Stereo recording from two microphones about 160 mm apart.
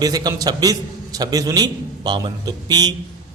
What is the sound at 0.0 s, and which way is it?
A man's voice, 25° right (ahead or behind).